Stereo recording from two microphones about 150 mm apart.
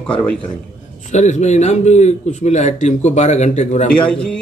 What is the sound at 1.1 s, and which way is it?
A man's voice, 50° left (ahead or behind).